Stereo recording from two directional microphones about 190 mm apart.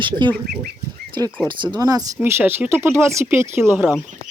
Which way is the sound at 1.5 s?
25° right (ahead or behind).